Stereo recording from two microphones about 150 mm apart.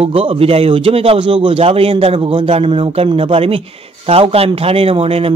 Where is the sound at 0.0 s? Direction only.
35° right (ahead or behind).